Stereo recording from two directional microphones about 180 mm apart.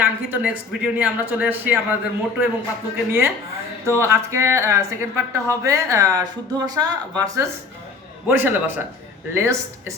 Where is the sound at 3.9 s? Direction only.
15° right (ahead or behind).